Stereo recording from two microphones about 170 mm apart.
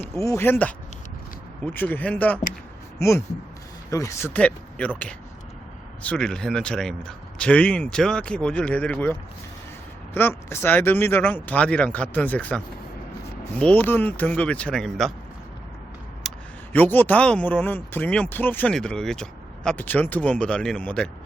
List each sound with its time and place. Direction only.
0.1 s speech: 15° left (ahead or behind)
4.4 s speech: 5° left (ahead or behind)
6.0 s a man's voice: 5° left (ahead or behind)
10.2 s speech: 15° left (ahead or behind)
16.2 s a sound: centre (ahead or behind)
16.7 s speech: 10° left (ahead or behind)